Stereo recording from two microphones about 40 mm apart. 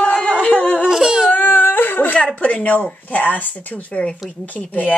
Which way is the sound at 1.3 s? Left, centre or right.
Left.